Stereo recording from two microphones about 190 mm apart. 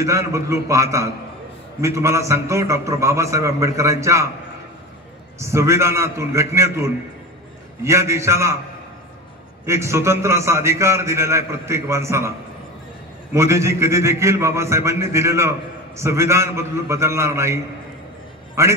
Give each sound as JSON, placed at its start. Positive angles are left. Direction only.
{"t": 0.0, "sound": "a man's voice", "side_deg": -15}
{"t": 5.4, "sound": "a man's voice", "side_deg": -15}
{"t": 9.7, "sound": "a man's voice", "side_deg": -15}
{"t": 13.3, "sound": "a man's voice", "side_deg": -15}
{"t": 18.6, "sound": "a man's voice", "side_deg": -15}